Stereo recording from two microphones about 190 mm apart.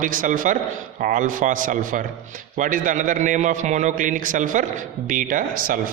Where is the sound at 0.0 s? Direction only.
45° right (ahead or behind).